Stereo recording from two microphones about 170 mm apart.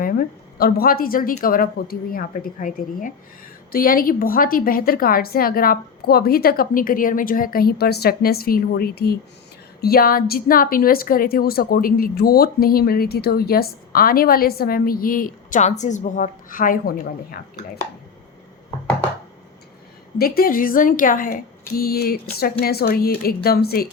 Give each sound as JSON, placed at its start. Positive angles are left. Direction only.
{"t": 0.0, "sound": "a woman's voice", "side_deg": 60}
{"t": 20.1, "sound": "a woman's voice", "side_deg": 60}